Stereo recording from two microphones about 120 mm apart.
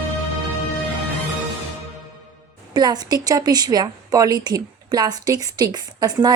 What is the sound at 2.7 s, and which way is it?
A woman's voice, 35° right (ahead or behind).